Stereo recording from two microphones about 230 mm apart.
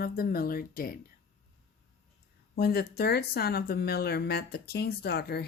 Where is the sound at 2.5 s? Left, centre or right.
Left.